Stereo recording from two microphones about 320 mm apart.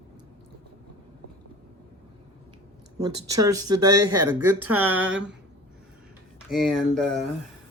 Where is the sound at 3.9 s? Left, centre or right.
Right.